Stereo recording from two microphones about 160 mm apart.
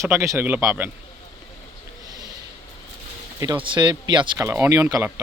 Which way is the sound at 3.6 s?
30° right (ahead or behind).